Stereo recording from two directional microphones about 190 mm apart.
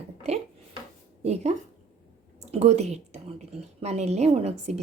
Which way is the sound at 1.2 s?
35° right (ahead or behind).